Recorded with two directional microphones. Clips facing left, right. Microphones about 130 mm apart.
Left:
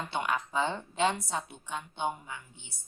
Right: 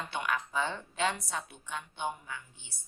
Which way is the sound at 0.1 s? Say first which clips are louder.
Left 2 dB; 25° left (ahead or behind).